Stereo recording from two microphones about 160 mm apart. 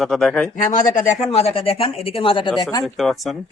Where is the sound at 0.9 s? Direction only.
45° left (ahead or behind).